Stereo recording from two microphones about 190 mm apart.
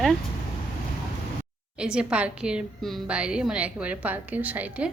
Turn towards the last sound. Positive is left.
turn(degrees=-10)  # may be behind; listen again after turning